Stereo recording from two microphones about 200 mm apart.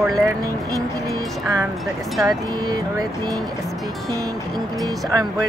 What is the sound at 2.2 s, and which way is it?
Speech, 20° right (ahead or behind).